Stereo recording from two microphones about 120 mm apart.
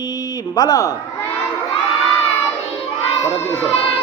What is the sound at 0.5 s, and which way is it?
Speech, 30° left (ahead or behind).